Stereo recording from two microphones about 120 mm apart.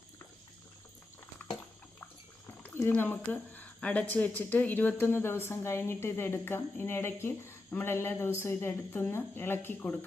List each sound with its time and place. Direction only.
2.7 s a woman's voice: 20° left (ahead or behind)